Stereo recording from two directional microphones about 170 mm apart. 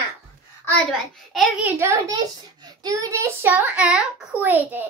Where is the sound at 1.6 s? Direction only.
15° right (ahead or behind).